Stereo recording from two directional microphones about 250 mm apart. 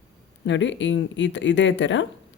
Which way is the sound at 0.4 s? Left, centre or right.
Left.